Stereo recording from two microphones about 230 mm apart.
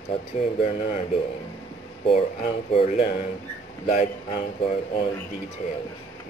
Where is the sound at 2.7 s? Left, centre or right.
Left.